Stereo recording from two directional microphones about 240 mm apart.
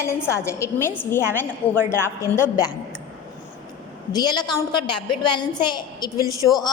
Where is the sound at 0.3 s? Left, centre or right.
Centre.